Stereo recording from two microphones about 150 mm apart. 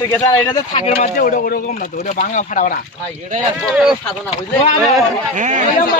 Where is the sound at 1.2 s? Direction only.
70° left (ahead or behind).